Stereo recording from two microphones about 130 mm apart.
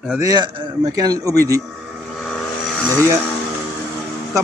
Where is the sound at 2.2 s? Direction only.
5° left (ahead or behind).